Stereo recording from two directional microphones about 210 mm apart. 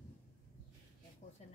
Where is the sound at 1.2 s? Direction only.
35° left (ahead or behind).